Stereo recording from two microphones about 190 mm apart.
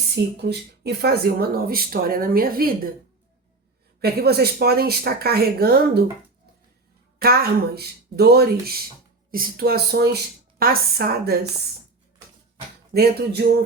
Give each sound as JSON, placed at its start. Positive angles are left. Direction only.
{"t": 0.3, "sound": "speech", "side_deg": -60}
{"t": 4.0, "sound": "speech", "side_deg": -55}
{"t": 7.2, "sound": "speech", "side_deg": -55}
{"t": 12.9, "sound": "speech", "side_deg": -55}